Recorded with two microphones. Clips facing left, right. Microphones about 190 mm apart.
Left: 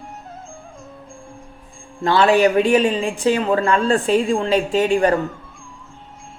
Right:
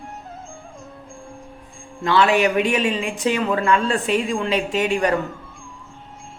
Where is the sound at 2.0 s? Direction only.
35° left (ahead or behind).